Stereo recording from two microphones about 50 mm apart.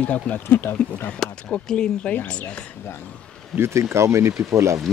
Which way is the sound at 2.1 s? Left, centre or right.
Left.